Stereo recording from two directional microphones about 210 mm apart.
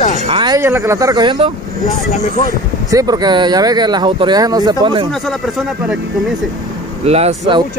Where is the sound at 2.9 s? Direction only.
15° right (ahead or behind).